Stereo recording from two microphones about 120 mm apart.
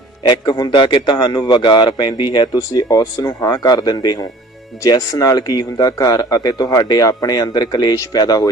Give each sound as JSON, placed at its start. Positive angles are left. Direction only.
{"t": 0.2, "sound": "speech", "side_deg": 35}